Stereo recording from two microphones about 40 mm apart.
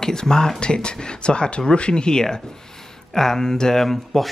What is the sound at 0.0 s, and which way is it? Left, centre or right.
Speech, centre.